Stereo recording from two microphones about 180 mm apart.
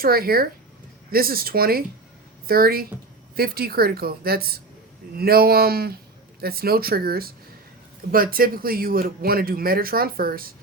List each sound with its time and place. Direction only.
0.0 s speech: 55° right (ahead or behind)